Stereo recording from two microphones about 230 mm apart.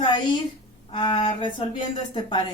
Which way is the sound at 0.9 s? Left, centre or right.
Left.